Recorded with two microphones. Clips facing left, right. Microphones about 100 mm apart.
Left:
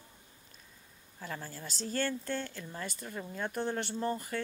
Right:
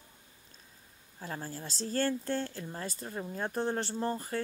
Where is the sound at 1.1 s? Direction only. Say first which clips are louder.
Right 2 dB; 35° right (ahead or behind).